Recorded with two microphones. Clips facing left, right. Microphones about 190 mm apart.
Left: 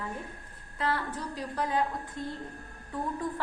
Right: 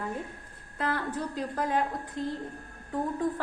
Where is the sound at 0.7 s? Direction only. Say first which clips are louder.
Right 1 dB; 55° right (ahead or behind).